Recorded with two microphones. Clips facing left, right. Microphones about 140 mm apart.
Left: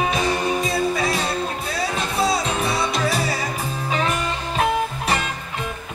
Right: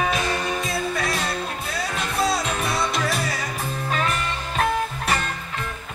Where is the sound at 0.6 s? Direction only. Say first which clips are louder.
Left 4 dB; centre (ahead or behind).